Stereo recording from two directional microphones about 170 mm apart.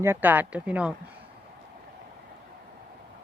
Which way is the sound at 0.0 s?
10° right (ahead or behind).